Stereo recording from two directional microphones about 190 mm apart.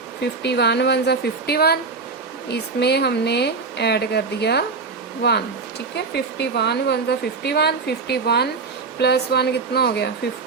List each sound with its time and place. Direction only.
0.2 s a woman's voice: 60° left (ahead or behind)
6.1 s a woman's voice: 60° left (ahead or behind)